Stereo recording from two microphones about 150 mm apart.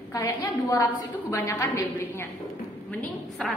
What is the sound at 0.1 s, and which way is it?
A woman's voice, 20° left (ahead or behind).